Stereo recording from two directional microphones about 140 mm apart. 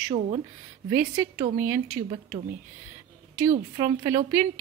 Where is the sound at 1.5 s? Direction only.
15° right (ahead or behind).